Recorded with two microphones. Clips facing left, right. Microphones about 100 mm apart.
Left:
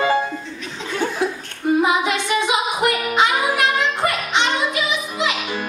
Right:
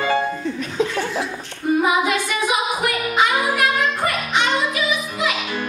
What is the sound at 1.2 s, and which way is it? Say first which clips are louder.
Laughter: left 6 dB; 50° left (ahead or behind).